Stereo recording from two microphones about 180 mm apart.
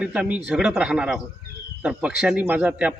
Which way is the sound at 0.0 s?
5° right (ahead or behind).